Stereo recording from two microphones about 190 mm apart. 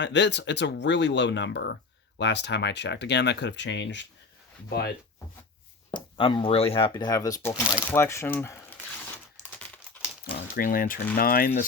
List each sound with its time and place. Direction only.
0.0 s speech: 65° left (ahead or behind)
4.7 s speech: 55° left (ahead or behind)
5.9 s speech: 25° left (ahead or behind)
9.5 s crumpling: 10° left (ahead or behind)
10.2 s speech: 50° left (ahead or behind)